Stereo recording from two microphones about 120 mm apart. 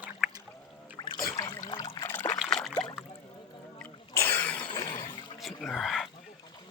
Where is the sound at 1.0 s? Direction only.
35° left (ahead or behind).